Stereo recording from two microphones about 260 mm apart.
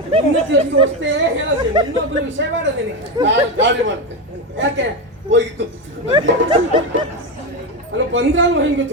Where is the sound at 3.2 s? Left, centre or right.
Right.